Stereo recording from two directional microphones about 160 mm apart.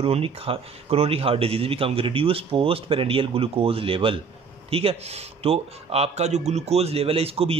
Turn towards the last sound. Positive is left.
turn(degrees=-35)  # may be behind; listen again after turning